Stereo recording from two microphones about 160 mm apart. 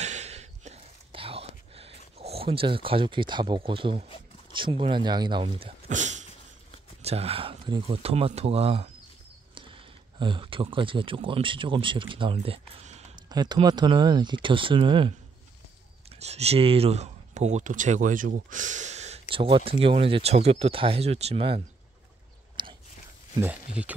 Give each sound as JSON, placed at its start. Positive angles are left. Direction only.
{"t": 0.0, "sound": "whispering", "side_deg": -45}
{"t": 4.5, "sound": "speech", "side_deg": -30}
{"t": 5.9, "sound": "a sound", "side_deg": -50}
{"t": 7.0, "sound": "speech", "side_deg": -40}
{"t": 10.1, "sound": "speech", "side_deg": -30}
{"t": 23.4, "sound": "speech", "side_deg": -10}